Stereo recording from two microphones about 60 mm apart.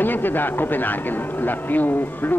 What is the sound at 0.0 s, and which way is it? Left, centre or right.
A man's voice, left.